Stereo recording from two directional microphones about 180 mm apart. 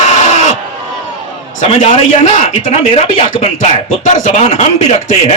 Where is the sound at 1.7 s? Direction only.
40° left (ahead or behind).